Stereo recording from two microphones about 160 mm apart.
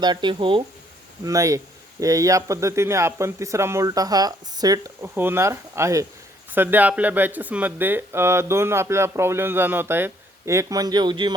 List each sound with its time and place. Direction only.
0.0 s speech: 30° right (ahead or behind)
1.2 s speech: 20° right (ahead or behind)